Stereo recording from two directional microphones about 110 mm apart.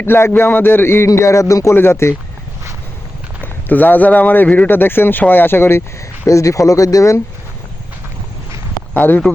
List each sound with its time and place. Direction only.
0.0 s speech: 20° left (ahead or behind)
3.4 s speech: 15° left (ahead or behind)
8.9 s speech: 15° left (ahead or behind)